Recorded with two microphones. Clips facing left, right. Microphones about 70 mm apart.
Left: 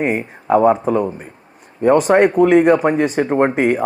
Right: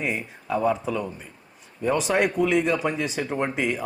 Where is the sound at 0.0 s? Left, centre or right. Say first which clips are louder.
Left 9 dB; left.